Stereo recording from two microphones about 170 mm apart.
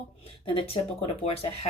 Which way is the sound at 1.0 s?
35° left (ahead or behind).